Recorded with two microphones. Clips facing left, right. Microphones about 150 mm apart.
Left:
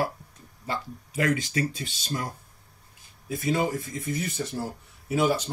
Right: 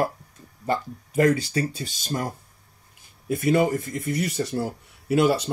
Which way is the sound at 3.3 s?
60° right (ahead or behind).